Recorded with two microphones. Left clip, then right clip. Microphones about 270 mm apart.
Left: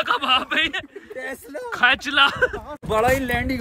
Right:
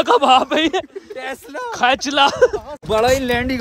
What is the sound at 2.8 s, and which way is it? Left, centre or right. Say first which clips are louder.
Speech: right 4 dB; right.